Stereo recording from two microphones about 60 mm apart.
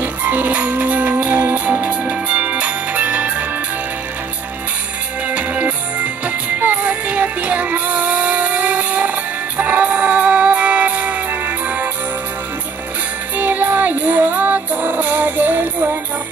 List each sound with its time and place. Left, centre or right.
0.0 s music: right
5.3 s music: right
13.4 s music: right